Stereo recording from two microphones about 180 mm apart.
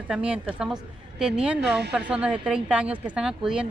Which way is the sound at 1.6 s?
70° right (ahead or behind).